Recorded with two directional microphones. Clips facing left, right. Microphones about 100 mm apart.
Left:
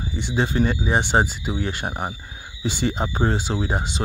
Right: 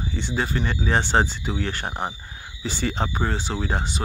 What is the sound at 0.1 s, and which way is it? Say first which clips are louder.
Speech: left 3 dB; 15° left (ahead or behind).